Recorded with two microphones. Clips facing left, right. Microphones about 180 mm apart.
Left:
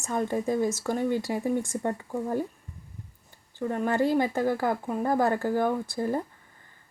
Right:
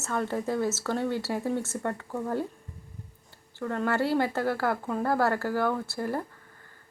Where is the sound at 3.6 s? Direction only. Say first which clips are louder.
Left 2 dB; 15° left (ahead or behind).